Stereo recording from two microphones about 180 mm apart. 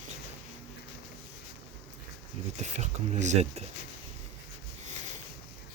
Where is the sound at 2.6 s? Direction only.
40° right (ahead or behind).